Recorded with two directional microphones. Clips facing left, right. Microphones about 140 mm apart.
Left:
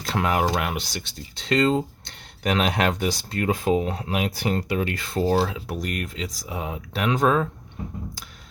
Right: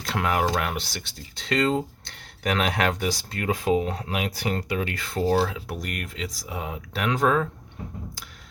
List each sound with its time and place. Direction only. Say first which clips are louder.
0.0 s speech: left 2 dB; 30° left (ahead or behind); by 0.9 s 15° left (ahead or behind)
1.4 s speech: left 3 dB; 25° left (ahead or behind)